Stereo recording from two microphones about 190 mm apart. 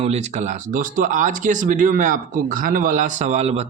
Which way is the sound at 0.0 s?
35° right (ahead or behind).